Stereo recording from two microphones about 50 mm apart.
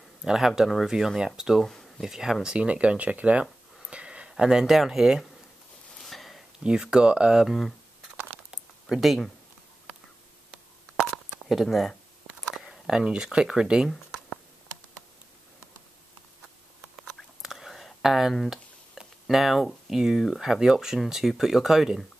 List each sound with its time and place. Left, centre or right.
0.2 s speech: centre
2.4 s speech: right
3.9 s a sound: right
4.4 s speech: centre
5.9 s sniff: centre
6.6 s speech: centre
7.4 s speech: centre
8.9 s speech: centre
11.4 s speech: centre
13.8 s a sound: centre
17.4 s a sound: centre
18.5 s speech: centre